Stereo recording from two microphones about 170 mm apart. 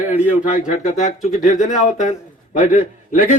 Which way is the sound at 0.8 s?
45° left (ahead or behind).